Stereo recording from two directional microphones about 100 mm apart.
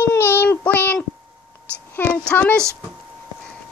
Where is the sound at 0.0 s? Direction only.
20° left (ahead or behind).